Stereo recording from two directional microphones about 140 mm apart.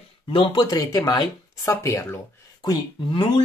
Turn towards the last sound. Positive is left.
turn(degrees=35)  # may be behind; listen again after turning